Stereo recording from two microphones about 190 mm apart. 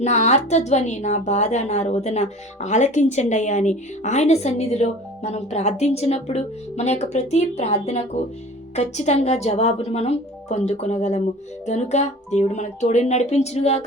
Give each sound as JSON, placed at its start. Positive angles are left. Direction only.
{"t": 0.0, "sound": "a woman's voice", "side_deg": 35}